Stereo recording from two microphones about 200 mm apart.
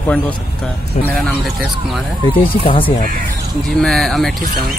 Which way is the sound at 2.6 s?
25° left (ahead or behind).